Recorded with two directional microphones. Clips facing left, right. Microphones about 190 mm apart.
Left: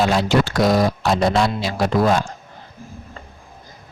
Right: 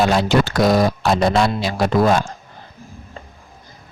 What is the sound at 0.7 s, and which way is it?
Speech, 55° right (ahead or behind).